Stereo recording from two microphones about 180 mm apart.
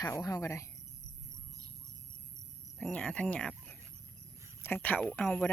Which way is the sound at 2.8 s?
5° left (ahead or behind).